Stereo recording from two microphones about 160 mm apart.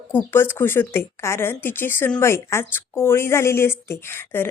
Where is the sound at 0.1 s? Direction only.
15° left (ahead or behind).